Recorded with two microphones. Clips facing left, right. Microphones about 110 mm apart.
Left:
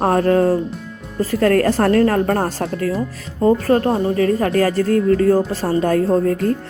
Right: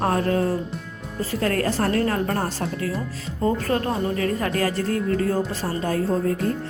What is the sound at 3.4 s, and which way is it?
Speech, 35° left (ahead or behind).